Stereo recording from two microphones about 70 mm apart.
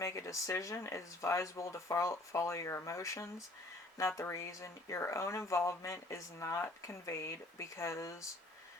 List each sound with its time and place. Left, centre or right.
0.0 s speech: left